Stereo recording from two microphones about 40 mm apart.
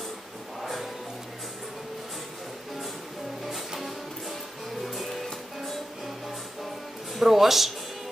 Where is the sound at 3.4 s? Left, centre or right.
Centre.